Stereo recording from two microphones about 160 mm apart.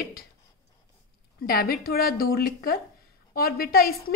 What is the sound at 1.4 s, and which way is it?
A woman's voice, 65° left (ahead or behind).